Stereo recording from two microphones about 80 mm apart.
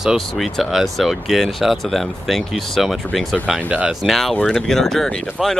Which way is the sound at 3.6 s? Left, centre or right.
Centre.